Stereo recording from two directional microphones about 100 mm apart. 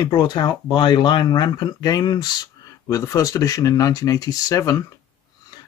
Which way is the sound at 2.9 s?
30° left (ahead or behind).